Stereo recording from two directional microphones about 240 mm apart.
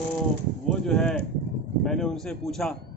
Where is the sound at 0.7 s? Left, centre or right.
Centre.